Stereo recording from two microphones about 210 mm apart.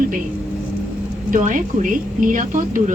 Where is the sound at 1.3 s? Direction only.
40° right (ahead or behind).